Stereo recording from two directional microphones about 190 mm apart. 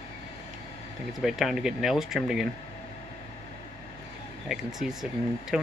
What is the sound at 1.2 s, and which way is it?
Speech, centre (ahead or behind).